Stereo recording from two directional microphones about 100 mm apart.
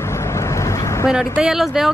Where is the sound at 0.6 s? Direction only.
30° left (ahead or behind).